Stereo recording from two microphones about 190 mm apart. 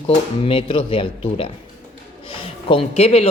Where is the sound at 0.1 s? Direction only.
30° left (ahead or behind).